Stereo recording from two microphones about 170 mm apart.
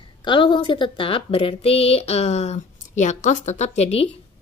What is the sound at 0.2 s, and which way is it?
A woman's voice, 25° left (ahead or behind).